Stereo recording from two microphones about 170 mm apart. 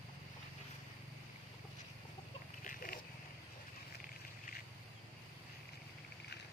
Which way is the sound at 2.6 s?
55° left (ahead or behind).